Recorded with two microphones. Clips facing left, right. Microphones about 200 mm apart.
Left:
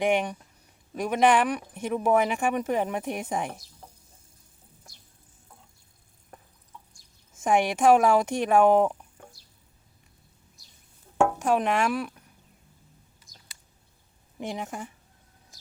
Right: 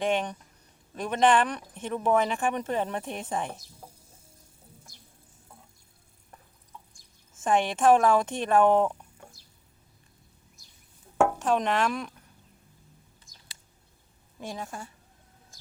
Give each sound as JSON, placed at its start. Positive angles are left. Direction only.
{"t": 0.0, "sound": "speech", "side_deg": 15}
{"t": 7.3, "sound": "speech", "side_deg": 10}
{"t": 11.3, "sound": "speech", "side_deg": 10}
{"t": 14.3, "sound": "a woman's voice", "side_deg": 20}